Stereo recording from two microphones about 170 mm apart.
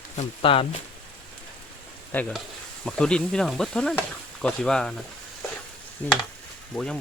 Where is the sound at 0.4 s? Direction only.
30° left (ahead or behind).